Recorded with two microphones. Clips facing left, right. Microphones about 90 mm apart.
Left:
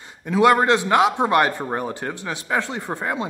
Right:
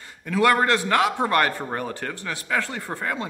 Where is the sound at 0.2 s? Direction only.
20° left (ahead or behind).